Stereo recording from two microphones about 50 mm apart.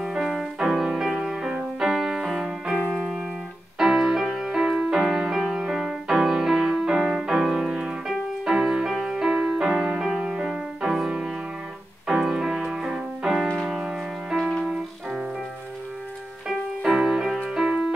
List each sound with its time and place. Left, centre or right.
0.0 s music: centre
16.4 s music: centre